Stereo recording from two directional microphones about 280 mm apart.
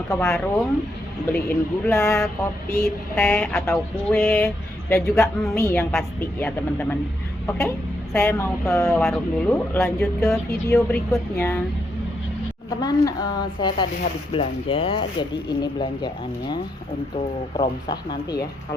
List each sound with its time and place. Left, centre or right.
0.1 s speech: centre
1.9 s mantra: centre
8.1 s mantra: centre
12.8 s mantra: centre